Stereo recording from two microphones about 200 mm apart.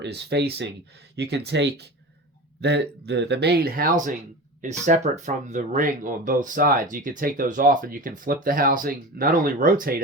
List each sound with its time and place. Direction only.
0.0 s speech: 55° right (ahead or behind)